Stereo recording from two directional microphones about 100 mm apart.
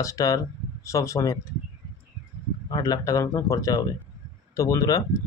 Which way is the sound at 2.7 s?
40° left (ahead or behind).